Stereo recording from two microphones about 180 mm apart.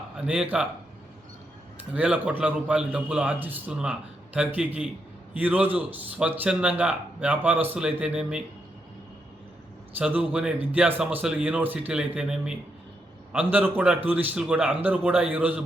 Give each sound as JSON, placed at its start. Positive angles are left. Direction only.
{"t": 0.3, "sound": "speech", "side_deg": -5}
{"t": 1.8, "sound": "a man's voice", "side_deg": -5}
{"t": 10.0, "sound": "a man's voice", "side_deg": -5}